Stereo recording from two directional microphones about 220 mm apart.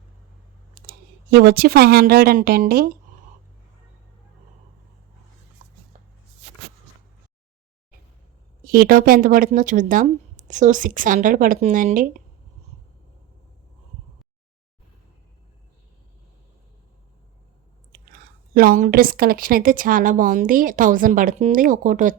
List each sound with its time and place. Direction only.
0.8 s speech: 45° right (ahead or behind)
5.6 s a sound: 25° right (ahead or behind)
8.6 s a woman's voice: 40° right (ahead or behind)
17.9 s a woman's voice: 40° right (ahead or behind)